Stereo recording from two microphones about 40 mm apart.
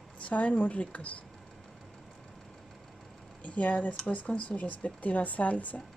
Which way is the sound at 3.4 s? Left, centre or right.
Left.